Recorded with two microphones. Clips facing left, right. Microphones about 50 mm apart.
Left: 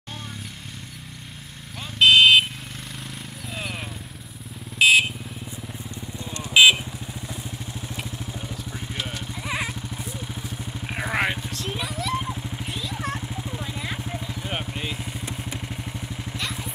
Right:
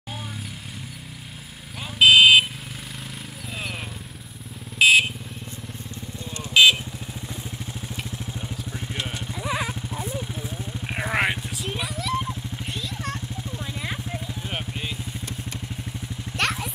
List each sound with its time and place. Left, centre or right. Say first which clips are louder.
2.0 s vehicle: right 1 dB; centre
4.7 s vehicle: even; centre
6.5 s vehicle: left 1 dB; centre
7.9 s vehicle: even; centre
10.9 s vehicle: right 1 dB; centre
13.7 s vehicle: even; centre
16.3 s vehicle: right 7 dB; right